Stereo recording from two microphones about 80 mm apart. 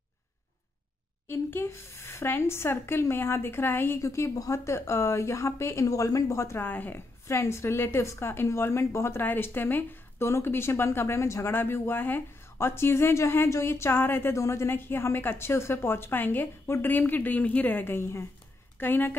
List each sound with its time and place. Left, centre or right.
1.2 s a woman's voice: left
4.0 s a woman's voice: left
7.2 s a woman's voice: left